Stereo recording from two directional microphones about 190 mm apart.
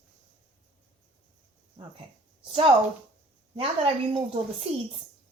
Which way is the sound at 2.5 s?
25° right (ahead or behind).